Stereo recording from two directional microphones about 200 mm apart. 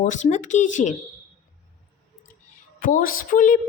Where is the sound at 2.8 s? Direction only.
45° left (ahead or behind).